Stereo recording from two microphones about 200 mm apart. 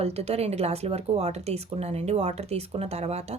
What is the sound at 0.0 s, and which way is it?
A woman's voice, 30° right (ahead or behind).